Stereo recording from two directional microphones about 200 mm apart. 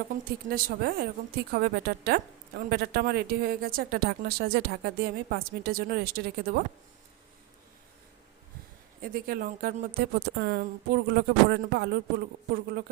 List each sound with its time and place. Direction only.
0.3 s a woman's voice: 50° right (ahead or behind)
9.0 s a woman's voice: 45° right (ahead or behind)